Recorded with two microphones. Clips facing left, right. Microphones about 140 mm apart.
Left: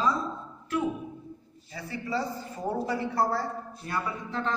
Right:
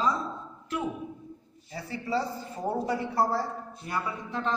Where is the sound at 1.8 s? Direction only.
30° right (ahead or behind).